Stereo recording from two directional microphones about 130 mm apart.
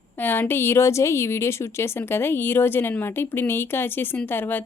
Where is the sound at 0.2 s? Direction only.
15° left (ahead or behind).